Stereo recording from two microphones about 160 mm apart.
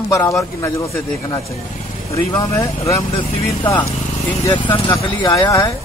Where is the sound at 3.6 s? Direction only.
30° left (ahead or behind).